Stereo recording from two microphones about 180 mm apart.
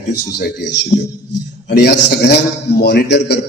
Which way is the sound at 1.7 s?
65° left (ahead or behind).